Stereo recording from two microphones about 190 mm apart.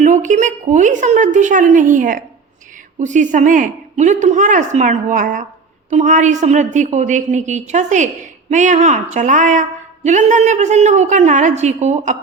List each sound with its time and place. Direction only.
0.0 s a woman's voice: 40° right (ahead or behind)